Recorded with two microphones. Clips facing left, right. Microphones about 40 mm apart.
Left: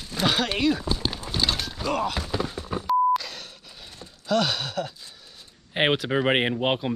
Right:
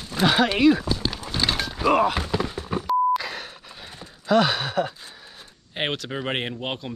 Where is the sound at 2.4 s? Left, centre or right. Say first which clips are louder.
Right 2 dB; centre.